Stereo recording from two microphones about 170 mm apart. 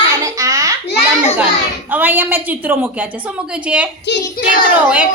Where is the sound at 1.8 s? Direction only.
10° right (ahead or behind).